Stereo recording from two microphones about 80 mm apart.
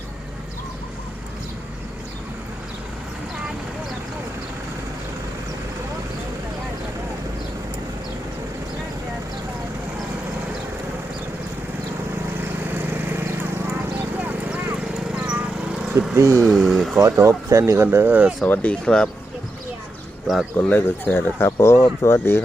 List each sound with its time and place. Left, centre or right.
12.4 s horse: right
15.1 s lawn mower: centre
16.1 s speech: right
16.5 s a sound: centre
17.2 s speech: right
18.4 s speech: centre
20.6 s speech: left